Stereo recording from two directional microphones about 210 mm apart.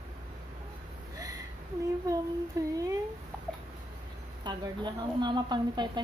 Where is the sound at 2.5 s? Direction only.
15° right (ahead or behind).